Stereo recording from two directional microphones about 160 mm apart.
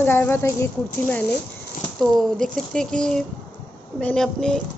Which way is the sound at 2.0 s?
Centre (ahead or behind).